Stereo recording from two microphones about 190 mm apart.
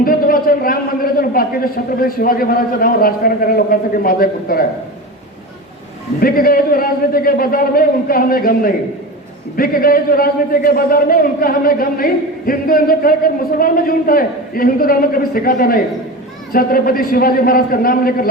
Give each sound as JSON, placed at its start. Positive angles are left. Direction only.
{"t": 0.0, "sound": "a man's voice", "side_deg": 50}
{"t": 6.1, "sound": "a man's voice", "side_deg": 50}